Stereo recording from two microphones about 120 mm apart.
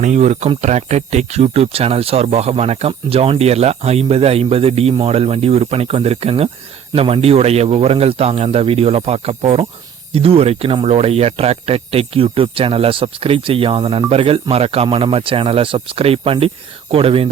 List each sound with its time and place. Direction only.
0.0 s speech: 75° right (ahead or behind); by 17.3 s 50° right (ahead or behind)